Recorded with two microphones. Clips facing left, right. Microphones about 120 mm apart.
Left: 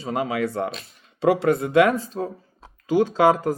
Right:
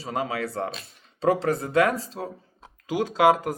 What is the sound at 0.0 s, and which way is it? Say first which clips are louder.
Speech: left 4 dB; 35° right (ahead or behind).